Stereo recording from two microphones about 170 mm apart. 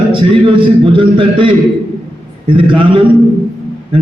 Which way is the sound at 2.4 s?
30° right (ahead or behind).